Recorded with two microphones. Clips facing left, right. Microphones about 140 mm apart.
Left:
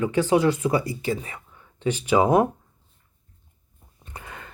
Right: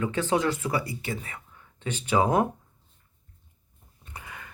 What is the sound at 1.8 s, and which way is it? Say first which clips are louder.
Speech: left 4 dB; 20° left (ahead or behind).